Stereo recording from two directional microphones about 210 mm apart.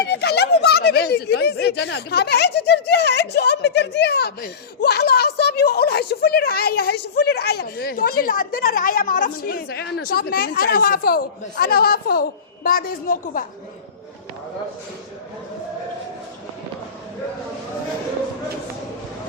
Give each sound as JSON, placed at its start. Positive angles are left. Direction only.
{"t": 0.0, "sound": "speech", "side_deg": 50}